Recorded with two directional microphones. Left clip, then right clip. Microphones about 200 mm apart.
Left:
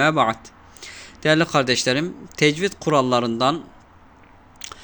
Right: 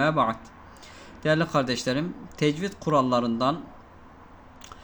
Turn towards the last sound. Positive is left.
turn(degrees=30)  # may be behind; listen again after turning